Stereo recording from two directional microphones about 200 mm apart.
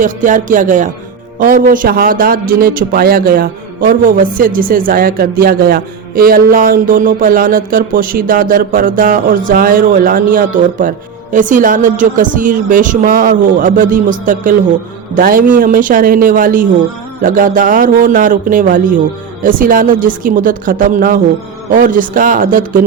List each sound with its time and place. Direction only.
0.0 s a man's voice: 40° right (ahead or behind)